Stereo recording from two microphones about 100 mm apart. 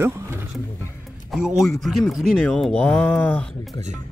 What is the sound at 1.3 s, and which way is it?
Speech, 5° right (ahead or behind).